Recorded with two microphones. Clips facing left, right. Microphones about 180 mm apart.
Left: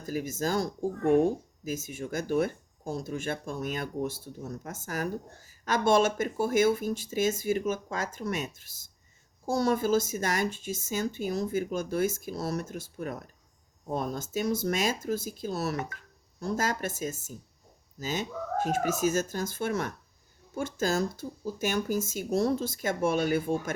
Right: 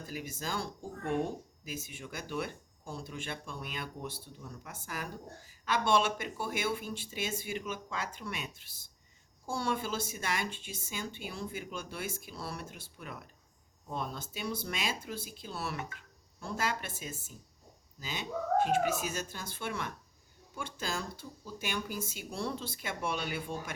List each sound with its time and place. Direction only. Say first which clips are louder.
0.0 s speech: left 9 dB; 45° left (ahead or behind)